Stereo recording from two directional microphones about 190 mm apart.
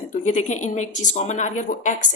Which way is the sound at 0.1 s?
40° left (ahead or behind).